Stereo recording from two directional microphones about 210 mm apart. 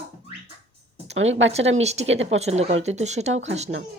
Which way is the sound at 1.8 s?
30° right (ahead or behind).